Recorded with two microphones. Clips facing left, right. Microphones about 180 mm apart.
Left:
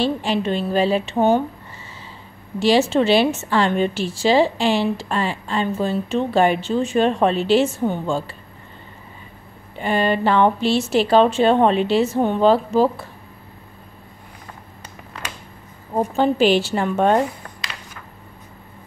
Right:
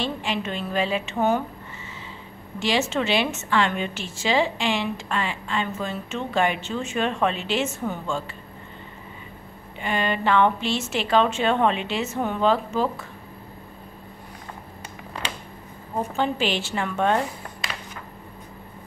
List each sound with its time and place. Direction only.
0.0 s a woman's voice: 35° left (ahead or behind)
2.6 s a woman's voice: 35° left (ahead or behind)
9.8 s a woman's voice: 35° left (ahead or behind)
16.0 s a woman's voice: 40° left (ahead or behind)